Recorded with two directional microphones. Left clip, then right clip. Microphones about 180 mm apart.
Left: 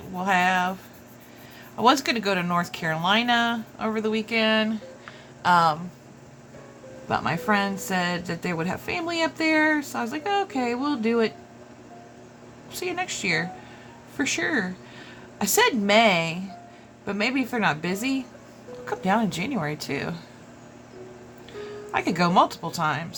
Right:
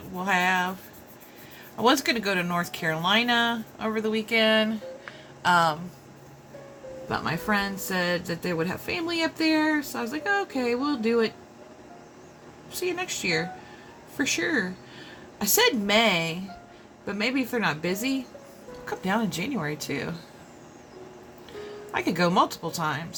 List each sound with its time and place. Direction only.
0.2 s speech: 20° left (ahead or behind)
1.7 s a woman's voice: 20° left (ahead or behind)
7.1 s a woman's voice: 20° left (ahead or behind)
12.7 s a woman's voice: 20° left (ahead or behind)
21.9 s a woman's voice: 20° left (ahead or behind)